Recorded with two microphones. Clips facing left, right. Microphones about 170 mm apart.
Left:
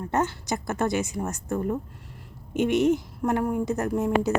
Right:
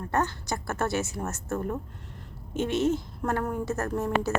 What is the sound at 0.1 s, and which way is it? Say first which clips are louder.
A woman's voice: left 2 dB; 20° left (ahead or behind).